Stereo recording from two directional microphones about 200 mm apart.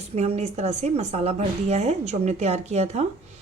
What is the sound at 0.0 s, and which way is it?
Speech, 35° right (ahead or behind).